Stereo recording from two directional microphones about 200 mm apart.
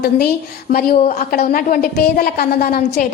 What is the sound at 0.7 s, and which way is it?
A woman's voice, 45° left (ahead or behind).